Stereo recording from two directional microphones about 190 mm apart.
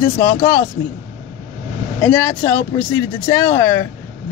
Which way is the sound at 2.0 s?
15° left (ahead or behind).